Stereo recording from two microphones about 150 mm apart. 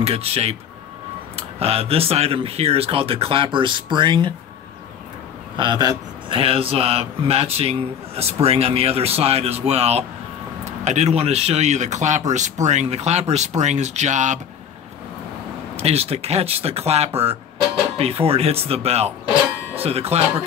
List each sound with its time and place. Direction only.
0.0 s speech: 40° right (ahead or behind)
5.6 s speech: 30° right (ahead or behind); by 14.4 s 55° right (ahead or behind)
15.7 s speech: 45° right (ahead or behind)